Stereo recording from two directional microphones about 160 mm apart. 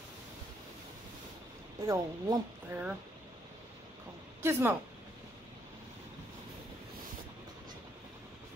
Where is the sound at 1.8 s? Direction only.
20° right (ahead or behind).